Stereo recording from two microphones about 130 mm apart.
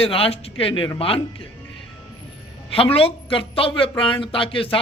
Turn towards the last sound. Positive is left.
turn(degrees=45)  # may be behind; listen again after turning